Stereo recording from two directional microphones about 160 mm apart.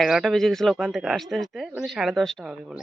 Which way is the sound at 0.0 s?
Centre (ahead or behind).